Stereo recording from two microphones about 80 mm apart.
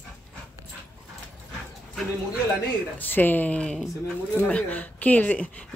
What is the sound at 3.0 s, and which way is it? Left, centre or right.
A woman's voice, left.